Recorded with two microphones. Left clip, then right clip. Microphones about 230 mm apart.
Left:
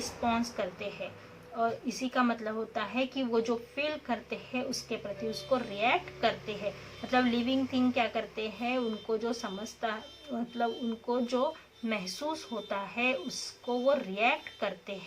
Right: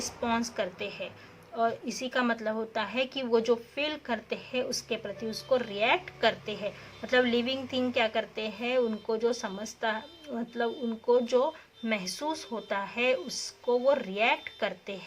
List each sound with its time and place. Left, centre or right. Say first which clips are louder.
0.2 s a woman's voice: right 1 dB; right